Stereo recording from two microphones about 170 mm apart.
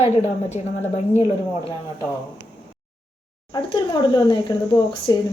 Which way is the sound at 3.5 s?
25° left (ahead or behind).